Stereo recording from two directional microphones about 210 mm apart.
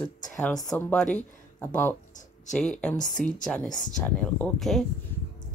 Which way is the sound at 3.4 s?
5° left (ahead or behind).